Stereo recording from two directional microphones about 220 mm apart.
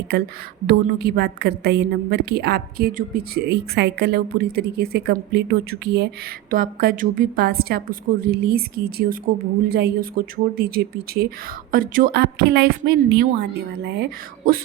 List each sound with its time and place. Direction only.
0.7 s a woman's voice: 45° right (ahead or behind)